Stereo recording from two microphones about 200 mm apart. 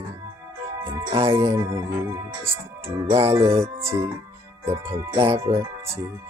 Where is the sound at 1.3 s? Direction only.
15° right (ahead or behind).